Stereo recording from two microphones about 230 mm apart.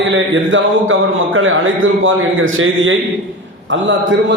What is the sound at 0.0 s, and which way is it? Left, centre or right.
A man's voice, right.